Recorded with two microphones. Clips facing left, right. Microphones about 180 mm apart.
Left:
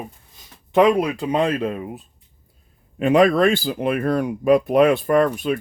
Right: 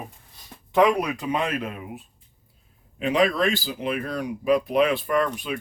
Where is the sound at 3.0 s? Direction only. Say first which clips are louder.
Left 6 dB; 50° left (ahead or behind).